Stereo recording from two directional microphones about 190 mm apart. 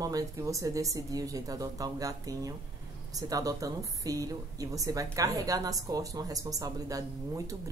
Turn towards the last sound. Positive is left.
turn(degrees=-15)  # may be behind; listen again after turning